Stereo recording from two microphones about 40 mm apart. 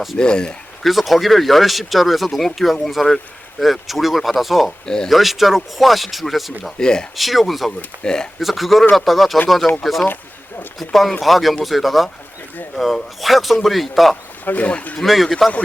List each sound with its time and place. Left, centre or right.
0.2 s speech: left
0.8 s speech: centre
6.7 s speech: centre
7.2 s speech: centre
8.0 s speech: centre
8.4 s speech: centre
14.4 s speech: left
14.7 s speech: left
15.0 s speech: centre